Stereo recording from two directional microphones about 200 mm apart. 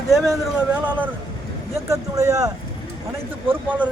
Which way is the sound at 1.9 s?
15° right (ahead or behind).